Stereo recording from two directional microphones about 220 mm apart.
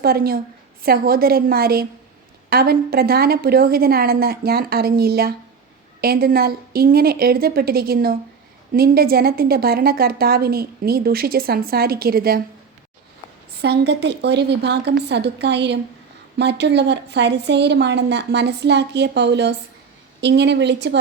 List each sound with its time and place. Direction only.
0.0 s a woman's voice: 45° right (ahead or behind)
13.5 s a woman's voice: 50° right (ahead or behind)